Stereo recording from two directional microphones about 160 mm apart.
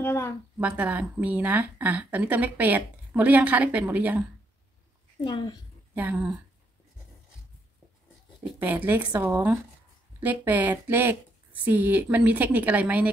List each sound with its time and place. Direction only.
0.0 s a woman's voice: 15° left (ahead or behind)
0.6 s a woman's voice: 10° right (ahead or behind)
5.2 s speech: 25° left (ahead or behind)
5.9 s a woman's voice: 10° right (ahead or behind)
8.5 s a woman's voice: 10° right (ahead or behind)